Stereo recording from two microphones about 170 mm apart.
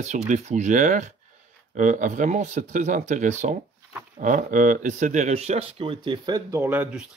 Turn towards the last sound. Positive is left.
turn(degrees=-10)  # may be behind; listen again after turning